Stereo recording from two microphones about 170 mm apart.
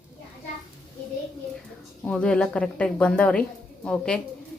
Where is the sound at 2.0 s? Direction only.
5° left (ahead or behind).